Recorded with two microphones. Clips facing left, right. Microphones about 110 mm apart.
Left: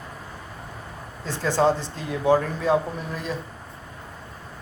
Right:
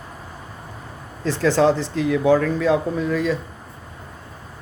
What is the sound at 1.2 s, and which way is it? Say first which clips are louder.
Speech: right 4 dB; 90° right.